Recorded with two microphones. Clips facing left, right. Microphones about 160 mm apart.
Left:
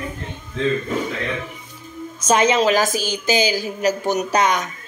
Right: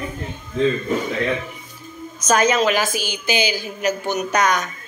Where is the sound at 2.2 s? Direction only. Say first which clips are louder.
Left 1 dB; 25° left (ahead or behind).